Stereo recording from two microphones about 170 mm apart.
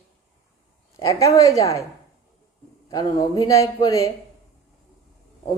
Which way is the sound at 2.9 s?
20° left (ahead or behind).